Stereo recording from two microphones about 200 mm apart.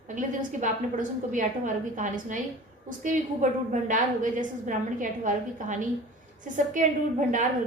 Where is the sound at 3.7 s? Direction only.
40° right (ahead or behind).